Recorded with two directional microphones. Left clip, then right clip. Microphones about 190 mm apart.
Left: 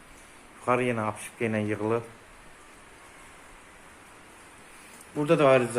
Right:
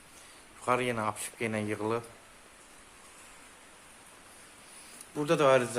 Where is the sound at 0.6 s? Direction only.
Centre (ahead or behind).